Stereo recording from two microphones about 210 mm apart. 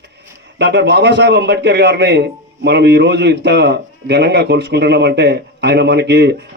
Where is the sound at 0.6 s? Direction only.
55° right (ahead or behind).